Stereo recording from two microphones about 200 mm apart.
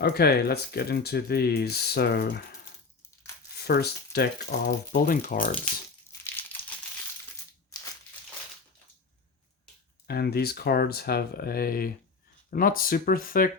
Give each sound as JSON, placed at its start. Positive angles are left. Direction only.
{"t": 0.0, "sound": "speech", "side_deg": 50}
{"t": 3.5, "sound": "speech", "side_deg": 50}
{"t": 6.1, "sound": "crushing", "side_deg": 10}
{"t": 10.1, "sound": "speech", "side_deg": 50}